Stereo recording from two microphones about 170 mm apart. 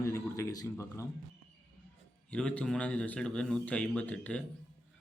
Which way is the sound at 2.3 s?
5° left (ahead or behind).